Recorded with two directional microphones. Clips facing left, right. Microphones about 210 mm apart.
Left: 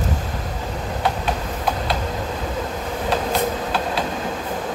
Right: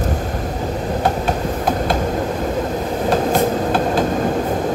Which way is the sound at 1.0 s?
45° right (ahead or behind).